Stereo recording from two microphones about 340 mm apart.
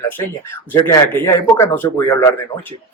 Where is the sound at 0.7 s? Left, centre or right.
Centre.